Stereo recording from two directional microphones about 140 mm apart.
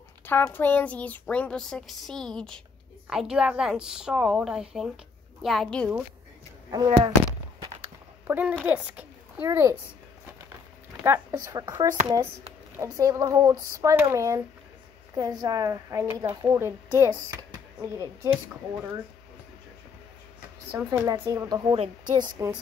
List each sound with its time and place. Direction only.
0.3 s a woman's voice: 15° left (ahead or behind)
6.7 s speech: 30° right (ahead or behind)
8.3 s a woman's voice: 10° right (ahead or behind)
11.1 s speech: 25° right (ahead or behind)
20.7 s speech: 25° right (ahead or behind)